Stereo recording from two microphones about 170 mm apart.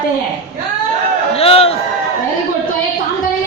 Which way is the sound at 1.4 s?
35° left (ahead or behind).